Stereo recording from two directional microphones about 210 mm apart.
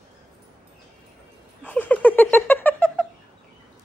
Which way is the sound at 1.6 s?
5° left (ahead or behind).